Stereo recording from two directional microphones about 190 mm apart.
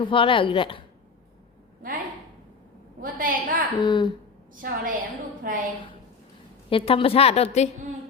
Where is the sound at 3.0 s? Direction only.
45° right (ahead or behind).